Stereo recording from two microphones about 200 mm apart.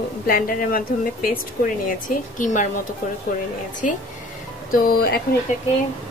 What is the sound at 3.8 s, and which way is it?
A woman's voice, 40° left (ahead or behind).